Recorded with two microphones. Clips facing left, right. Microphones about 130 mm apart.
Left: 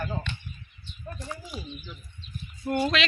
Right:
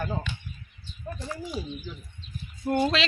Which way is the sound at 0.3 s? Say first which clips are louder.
Even; 5° right (ahead or behind).